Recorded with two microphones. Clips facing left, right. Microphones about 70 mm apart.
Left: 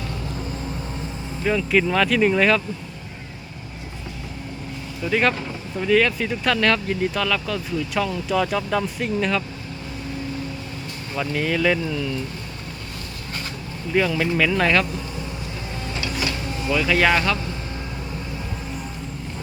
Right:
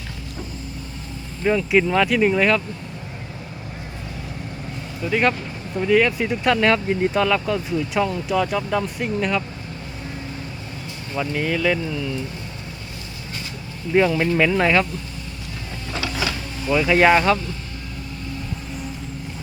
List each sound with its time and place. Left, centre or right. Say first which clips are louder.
1.5 s speech: right 2 dB; centre
5.0 s speech: even; centre
11.1 s speech: even; centre
13.9 s speech: right 3 dB; centre
14.5 s speech: right 1 dB; centre
16.7 s speech: right 4 dB; right